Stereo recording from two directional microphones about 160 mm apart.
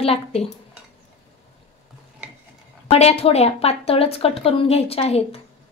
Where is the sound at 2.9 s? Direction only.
40° left (ahead or behind).